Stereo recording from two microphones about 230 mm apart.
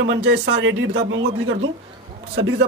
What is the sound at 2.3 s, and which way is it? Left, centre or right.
Speech, right.